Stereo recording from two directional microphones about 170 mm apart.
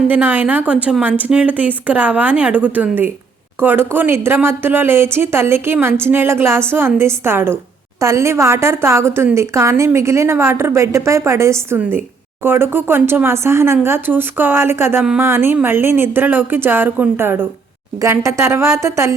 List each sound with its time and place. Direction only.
0.1 s speech: 10° right (ahead or behind)